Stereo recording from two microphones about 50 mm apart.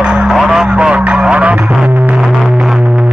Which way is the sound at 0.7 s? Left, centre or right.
Right.